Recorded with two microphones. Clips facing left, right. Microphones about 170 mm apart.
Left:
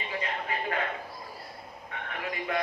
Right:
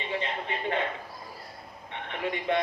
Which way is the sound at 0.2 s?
25° right (ahead or behind).